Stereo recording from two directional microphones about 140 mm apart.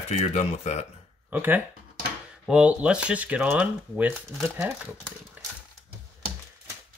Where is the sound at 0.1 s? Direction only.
50° left (ahead or behind).